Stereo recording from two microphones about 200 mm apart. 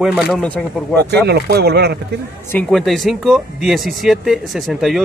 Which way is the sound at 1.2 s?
55° right (ahead or behind).